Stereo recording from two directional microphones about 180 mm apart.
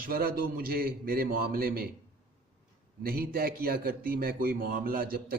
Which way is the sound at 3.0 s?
55° right (ahead or behind).